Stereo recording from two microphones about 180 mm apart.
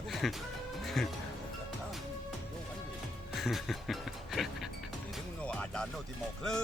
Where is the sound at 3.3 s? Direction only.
Centre (ahead or behind).